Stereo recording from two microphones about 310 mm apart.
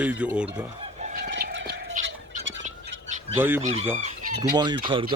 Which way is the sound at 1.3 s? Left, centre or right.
Right.